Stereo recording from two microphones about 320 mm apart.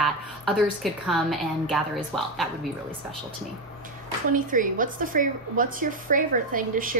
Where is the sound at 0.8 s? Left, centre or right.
Centre.